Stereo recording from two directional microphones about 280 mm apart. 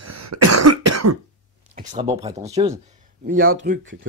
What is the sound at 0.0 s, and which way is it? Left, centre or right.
Cough, right.